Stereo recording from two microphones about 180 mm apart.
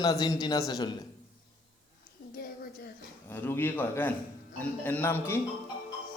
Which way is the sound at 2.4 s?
55° left (ahead or behind).